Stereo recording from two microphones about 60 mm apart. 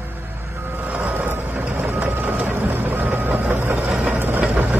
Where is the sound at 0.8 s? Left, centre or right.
Right.